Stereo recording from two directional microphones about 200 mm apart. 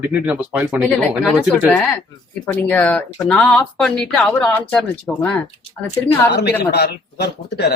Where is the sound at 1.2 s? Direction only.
5° left (ahead or behind).